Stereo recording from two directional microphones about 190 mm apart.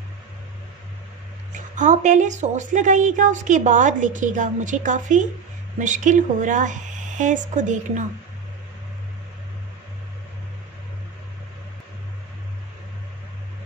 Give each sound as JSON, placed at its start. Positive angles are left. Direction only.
{"t": 1.5, "sound": "a woman's voice", "side_deg": -40}